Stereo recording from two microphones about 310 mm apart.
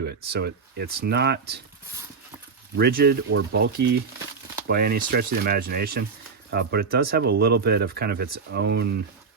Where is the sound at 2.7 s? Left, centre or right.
Right.